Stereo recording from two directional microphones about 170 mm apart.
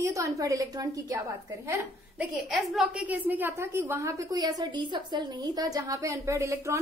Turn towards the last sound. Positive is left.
turn(degrees=-15)  # may be behind; listen again after turning